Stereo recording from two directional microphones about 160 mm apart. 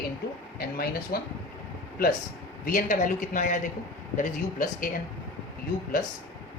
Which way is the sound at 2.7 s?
60° left (ahead or behind).